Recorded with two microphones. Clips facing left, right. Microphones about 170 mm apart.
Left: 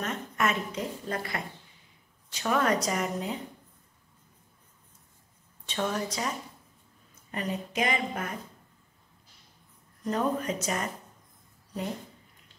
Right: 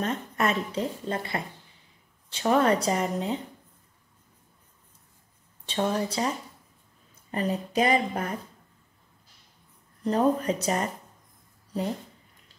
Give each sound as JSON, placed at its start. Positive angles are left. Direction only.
{"t": 0.0, "sound": "speech", "side_deg": -30}
{"t": 5.7, "sound": "speech", "side_deg": -30}
{"t": 10.0, "sound": "speech", "side_deg": -35}